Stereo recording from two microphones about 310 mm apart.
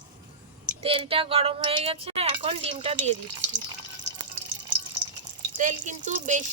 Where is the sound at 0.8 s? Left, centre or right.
Centre.